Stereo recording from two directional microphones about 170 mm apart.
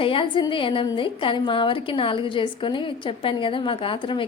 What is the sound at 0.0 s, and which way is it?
A woman's voice, 30° left (ahead or behind).